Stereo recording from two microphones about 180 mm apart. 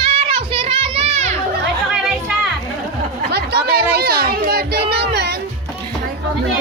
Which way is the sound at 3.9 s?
60° right (ahead or behind).